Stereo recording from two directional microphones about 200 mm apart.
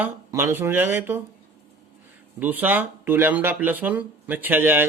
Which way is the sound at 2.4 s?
10° right (ahead or behind).